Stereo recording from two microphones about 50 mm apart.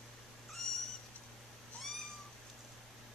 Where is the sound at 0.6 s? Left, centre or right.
Centre.